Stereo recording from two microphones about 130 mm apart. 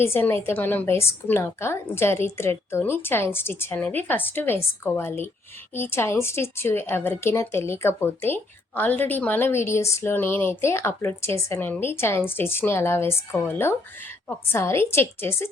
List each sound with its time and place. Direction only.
0.0 s a woman's voice: 15° left (ahead or behind)